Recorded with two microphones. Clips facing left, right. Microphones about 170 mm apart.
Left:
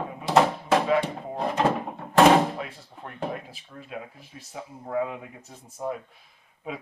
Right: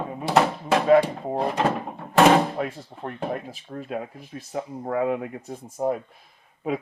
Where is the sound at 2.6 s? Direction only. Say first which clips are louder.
Right 7 dB; 45° right (ahead or behind).